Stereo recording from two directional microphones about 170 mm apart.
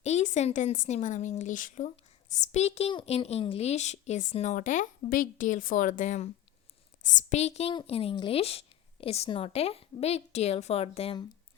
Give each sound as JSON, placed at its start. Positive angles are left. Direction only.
{"t": 0.0, "sound": "a woman's voice", "side_deg": 40}